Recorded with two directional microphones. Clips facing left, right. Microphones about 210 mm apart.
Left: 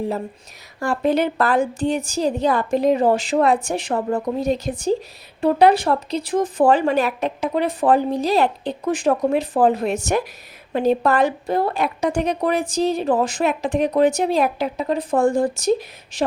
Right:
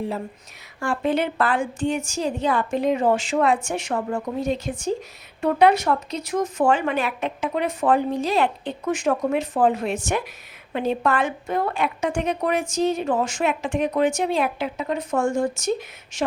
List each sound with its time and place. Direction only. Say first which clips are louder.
0.8 s a woman's voice: left 3 dB; 40° left (ahead or behind)